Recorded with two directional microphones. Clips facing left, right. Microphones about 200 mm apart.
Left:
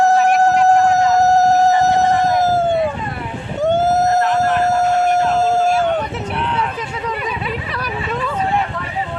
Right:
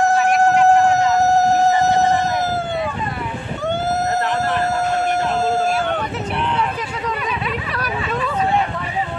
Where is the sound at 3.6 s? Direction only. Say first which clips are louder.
Left 6 dB; 45° left (ahead or behind).